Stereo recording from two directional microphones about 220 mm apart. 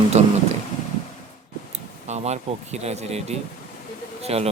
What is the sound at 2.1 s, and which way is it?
Speech, 30° right (ahead or behind).